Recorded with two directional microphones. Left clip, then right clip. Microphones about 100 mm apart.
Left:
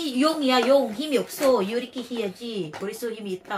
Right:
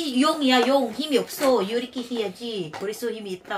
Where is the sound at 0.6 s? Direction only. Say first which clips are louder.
Left 2 dB; 25° right (ahead or behind).